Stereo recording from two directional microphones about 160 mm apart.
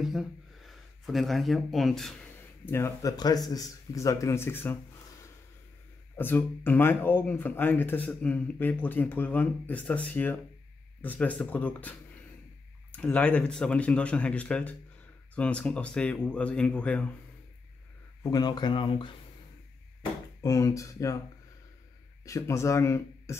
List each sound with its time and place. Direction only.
0.0 s speech: centre (ahead or behind)
2.6 s speech: 15° left (ahead or behind)
6.1 s speech: 10° left (ahead or behind)
18.2 s speech: 25° left (ahead or behind)
20.4 s speech: 20° left (ahead or behind)
22.2 s speech: 20° left (ahead or behind)